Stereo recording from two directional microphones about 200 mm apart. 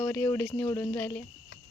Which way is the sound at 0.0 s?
10° left (ahead or behind).